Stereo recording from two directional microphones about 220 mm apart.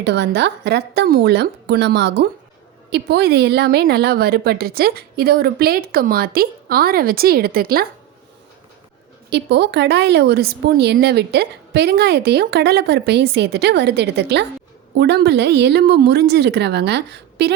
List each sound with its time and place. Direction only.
0.0 s a woman's voice: 50° right (ahead or behind)
9.3 s a woman's voice: 50° right (ahead or behind)